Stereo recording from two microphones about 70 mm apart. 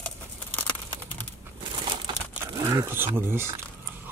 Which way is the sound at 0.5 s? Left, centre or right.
Left.